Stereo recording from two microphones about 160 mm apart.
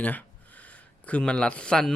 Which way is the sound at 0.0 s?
10° left (ahead or behind).